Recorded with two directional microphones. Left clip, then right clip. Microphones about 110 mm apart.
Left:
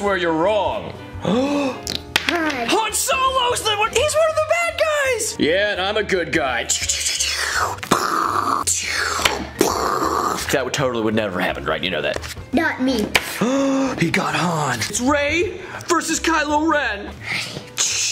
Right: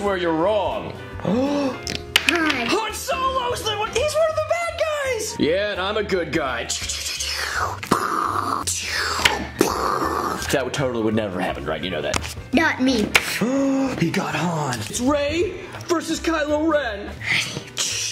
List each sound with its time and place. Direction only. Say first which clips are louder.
0.0 s speech: left 2 dB; 10° left (ahead or behind)
2.7 s music: left 4 dB; 10° left (ahead or behind)
7.9 s a sound: left 2 dB; 20° left (ahead or behind)
8.6 s whispering: left 3 dB; 10° left (ahead or behind)
9.6 s a sound: left 3 dB; 15° left (ahead or behind)
10.5 s speech: left 1 dB; 5° left (ahead or behind)
12.5 s a child's voice: right 1 dB; 10° right (ahead or behind)
13.4 s speech: left 2 dB; 15° left (ahead or behind)
15.0 s a woman's voice: left 2 dB; 5° left (ahead or behind)
15.9 s speech: left 4 dB; 20° left (ahead or behind)
17.7 s music: left 4 dB; 5° left (ahead or behind)